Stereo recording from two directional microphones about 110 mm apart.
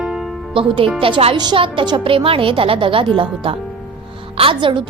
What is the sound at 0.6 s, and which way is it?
Speech, 55° right (ahead or behind).